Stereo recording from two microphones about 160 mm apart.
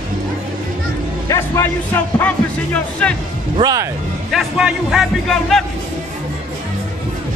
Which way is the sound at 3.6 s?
30° right (ahead or behind).